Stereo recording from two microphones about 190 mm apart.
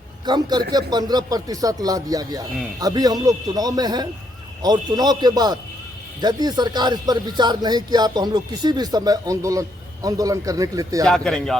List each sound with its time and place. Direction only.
0.3 s speech: 20° right (ahead or behind)
11.0 s speech: 5° left (ahead or behind)